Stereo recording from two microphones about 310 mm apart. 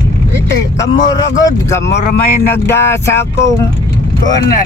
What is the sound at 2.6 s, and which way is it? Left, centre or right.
Speech, centre.